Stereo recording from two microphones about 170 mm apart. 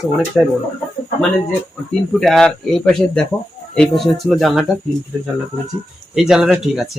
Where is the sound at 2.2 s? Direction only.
Centre (ahead or behind).